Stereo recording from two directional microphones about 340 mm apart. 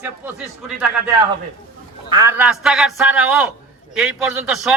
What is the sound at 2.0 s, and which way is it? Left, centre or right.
A man's voice, centre.